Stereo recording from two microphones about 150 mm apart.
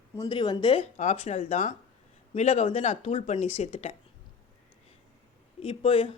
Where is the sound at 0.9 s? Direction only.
50° left (ahead or behind).